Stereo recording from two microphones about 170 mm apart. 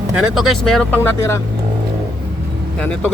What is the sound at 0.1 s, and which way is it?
Speech, 5° right (ahead or behind).